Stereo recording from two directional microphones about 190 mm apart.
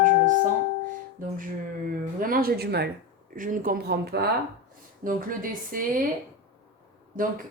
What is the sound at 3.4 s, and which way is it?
Speech, 45° right (ahead or behind).